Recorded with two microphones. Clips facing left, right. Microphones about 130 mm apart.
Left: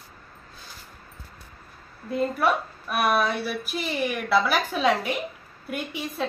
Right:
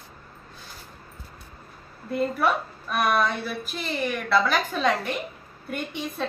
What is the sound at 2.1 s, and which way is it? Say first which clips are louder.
A woman's voice: even; 5° left (ahead or behind).